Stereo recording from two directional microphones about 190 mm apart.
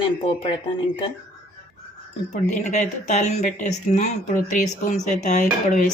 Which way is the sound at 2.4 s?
40° left (ahead or behind).